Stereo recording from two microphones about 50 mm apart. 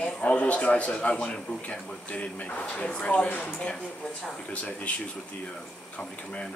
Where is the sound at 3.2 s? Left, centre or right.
Left.